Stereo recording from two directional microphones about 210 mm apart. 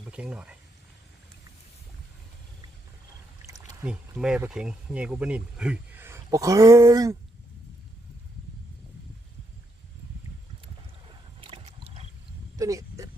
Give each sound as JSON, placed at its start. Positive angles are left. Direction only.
{"t": 0.1, "sound": "speech", "side_deg": -5}
{"t": 3.4, "sound": "speech", "side_deg": -10}
{"t": 11.1, "sound": "rowboat", "side_deg": -25}
{"t": 12.5, "sound": "a sound", "side_deg": -15}